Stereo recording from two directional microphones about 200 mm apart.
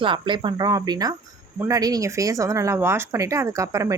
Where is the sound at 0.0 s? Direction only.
25° right (ahead or behind).